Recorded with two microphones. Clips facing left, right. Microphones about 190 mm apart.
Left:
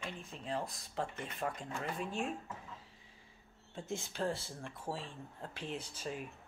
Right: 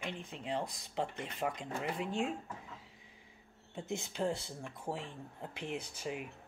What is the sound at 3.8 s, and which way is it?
Speech, 15° right (ahead or behind).